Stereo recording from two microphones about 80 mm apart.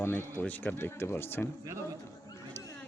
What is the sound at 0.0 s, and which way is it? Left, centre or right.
Speech, left.